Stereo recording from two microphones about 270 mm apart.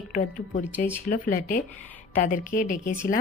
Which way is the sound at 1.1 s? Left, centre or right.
Left.